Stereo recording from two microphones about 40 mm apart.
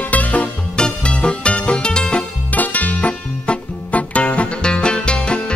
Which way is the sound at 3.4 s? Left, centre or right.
Left.